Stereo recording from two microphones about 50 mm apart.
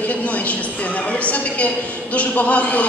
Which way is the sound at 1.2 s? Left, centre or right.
Left.